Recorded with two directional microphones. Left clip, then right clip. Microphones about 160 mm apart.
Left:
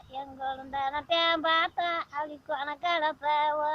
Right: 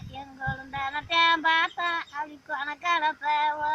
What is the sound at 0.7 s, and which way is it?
Child singing, 20° left (ahead or behind).